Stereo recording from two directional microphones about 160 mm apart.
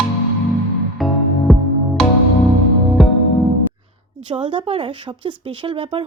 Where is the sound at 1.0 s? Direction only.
Centre (ahead or behind).